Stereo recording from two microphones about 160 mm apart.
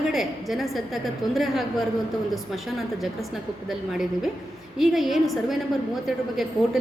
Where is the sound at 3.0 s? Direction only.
Centre (ahead or behind).